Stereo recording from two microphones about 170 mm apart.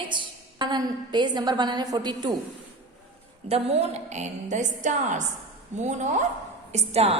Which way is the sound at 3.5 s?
35° right (ahead or behind).